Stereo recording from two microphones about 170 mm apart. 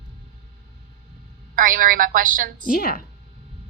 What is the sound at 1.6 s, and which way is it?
A woman's voice, 55° right (ahead or behind).